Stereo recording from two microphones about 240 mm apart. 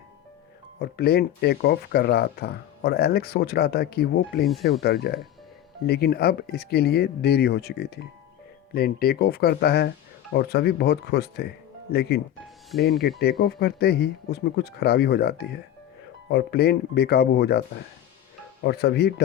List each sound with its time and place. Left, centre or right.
0.8 s speech: left
18.6 s speech: left